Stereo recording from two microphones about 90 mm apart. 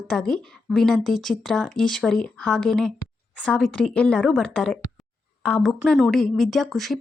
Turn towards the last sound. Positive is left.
turn(degrees=0)  # may be behind; listen again after turning